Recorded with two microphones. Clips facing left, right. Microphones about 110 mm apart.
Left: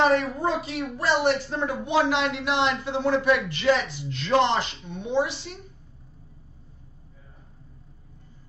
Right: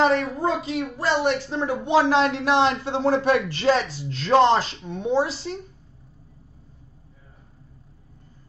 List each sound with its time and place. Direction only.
0.2 s a woman's voice: 30° right (ahead or behind)